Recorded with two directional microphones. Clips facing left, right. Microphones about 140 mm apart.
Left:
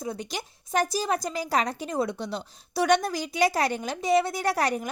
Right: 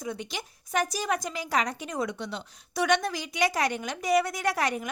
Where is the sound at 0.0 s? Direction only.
35° left (ahead or behind).